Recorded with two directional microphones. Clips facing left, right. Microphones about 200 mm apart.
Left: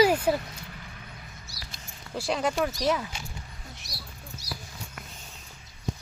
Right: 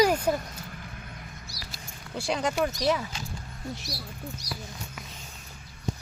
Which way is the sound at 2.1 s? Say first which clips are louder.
Left 1 dB; centre (ahead or behind).